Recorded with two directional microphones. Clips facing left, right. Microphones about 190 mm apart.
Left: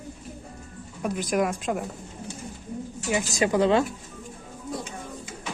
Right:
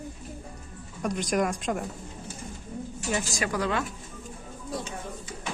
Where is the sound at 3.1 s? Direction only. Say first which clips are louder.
Left 5 dB; 15° left (ahead or behind).